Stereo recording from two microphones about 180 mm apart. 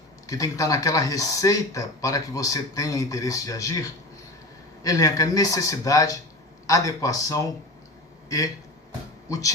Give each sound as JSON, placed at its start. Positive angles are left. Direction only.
{"t": 0.3, "sound": "speech", "side_deg": 20}